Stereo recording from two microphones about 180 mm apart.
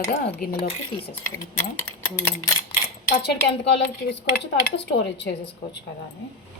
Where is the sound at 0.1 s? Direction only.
50° left (ahead or behind).